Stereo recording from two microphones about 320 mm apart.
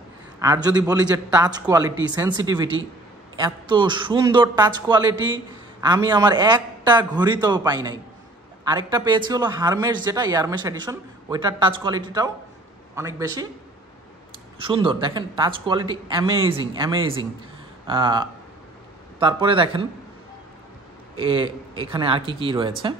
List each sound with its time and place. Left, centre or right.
0.4 s a man's voice: centre
14.6 s a man's voice: centre
21.2 s a man's voice: centre